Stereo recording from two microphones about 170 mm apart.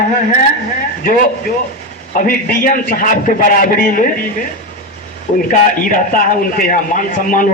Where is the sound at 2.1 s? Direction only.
55° left (ahead or behind).